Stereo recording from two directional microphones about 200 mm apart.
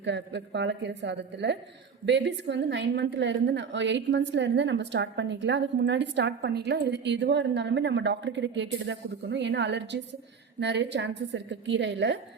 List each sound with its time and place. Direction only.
0.0 s a woman's voice: 60° right (ahead or behind)